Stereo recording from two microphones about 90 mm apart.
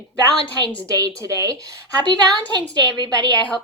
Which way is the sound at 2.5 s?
50° right (ahead or behind).